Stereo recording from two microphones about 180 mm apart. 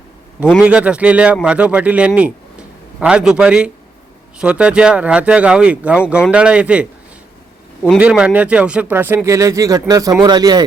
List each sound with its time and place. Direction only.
0.6 s a man's voice: 5° right (ahead or behind)
7.9 s speech: 5° right (ahead or behind); by 10.7 s 20° right (ahead or behind)